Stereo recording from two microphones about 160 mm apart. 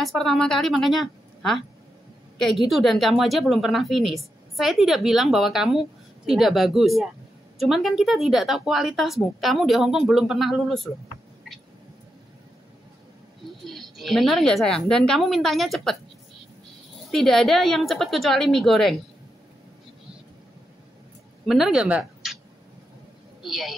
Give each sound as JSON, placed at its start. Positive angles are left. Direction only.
{"t": 0.0, "sound": "a woman's voice", "side_deg": 0}
{"t": 13.7, "sound": "a woman's voice", "side_deg": 0}
{"t": 17.1, "sound": "a woman's voice", "side_deg": 0}
{"t": 21.5, "sound": "speech", "side_deg": -5}
{"t": 23.4, "sound": "a woman's voice", "side_deg": 0}